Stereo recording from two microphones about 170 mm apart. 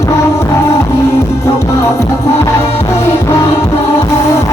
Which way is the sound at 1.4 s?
20° left (ahead or behind).